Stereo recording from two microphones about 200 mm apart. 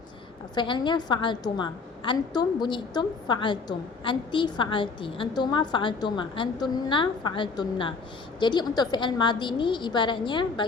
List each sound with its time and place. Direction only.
0.5 s a woman's voice: 25° left (ahead or behind)